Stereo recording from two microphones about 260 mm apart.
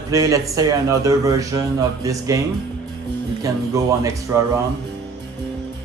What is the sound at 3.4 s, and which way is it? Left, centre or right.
Speech, centre.